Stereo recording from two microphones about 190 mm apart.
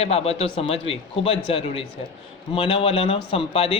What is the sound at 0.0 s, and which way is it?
Speech, 35° left (ahead or behind).